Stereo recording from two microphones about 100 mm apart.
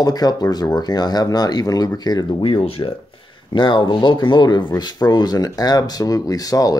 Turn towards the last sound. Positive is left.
turn(degrees=40)  # may be behind; listen again after turning